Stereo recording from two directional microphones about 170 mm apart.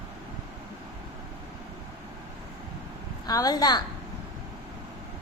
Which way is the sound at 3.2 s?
20° left (ahead or behind).